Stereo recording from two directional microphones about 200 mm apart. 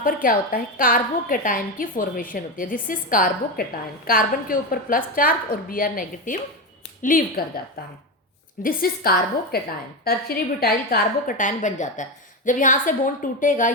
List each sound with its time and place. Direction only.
0.0 s a woman's voice: 45° left (ahead or behind)
8.6 s a woman's voice: 50° left (ahead or behind)